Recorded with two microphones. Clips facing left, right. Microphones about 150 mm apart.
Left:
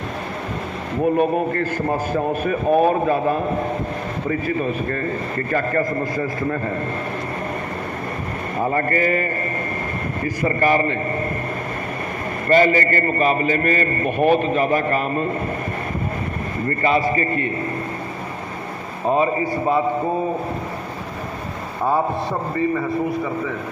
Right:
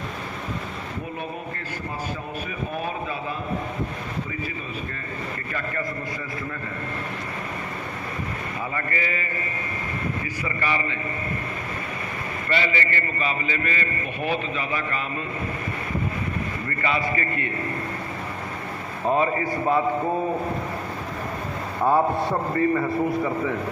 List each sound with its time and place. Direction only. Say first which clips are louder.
1.0 s a man's voice: left 14 dB; 60° left (ahead or behind); by 6.6 s 40° left (ahead or behind)
8.5 s a man's voice: left 11 dB; 45° left (ahead or behind)
12.5 s a man's voice: left 10 dB; 45° left (ahead or behind)
16.6 s a man's voice: left 8 dB; 40° left (ahead or behind)
19.0 s a man's voice: left 3 dB; 20° left (ahead or behind)
21.8 s a man's voice: even; centre (ahead or behind)